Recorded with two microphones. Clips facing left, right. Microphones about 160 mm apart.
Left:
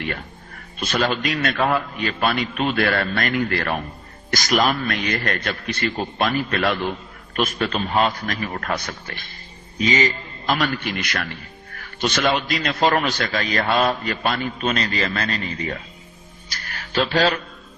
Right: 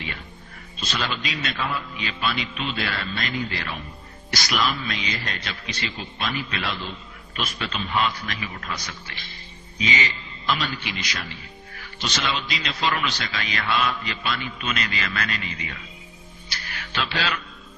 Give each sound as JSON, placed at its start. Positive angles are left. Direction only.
{"t": 0.0, "sound": "a sound", "side_deg": 55}
{"t": 0.8, "sound": "a man's voice", "side_deg": 50}
{"t": 4.3, "sound": "a man's voice", "side_deg": 45}
{"t": 16.5, "sound": "music", "side_deg": 45}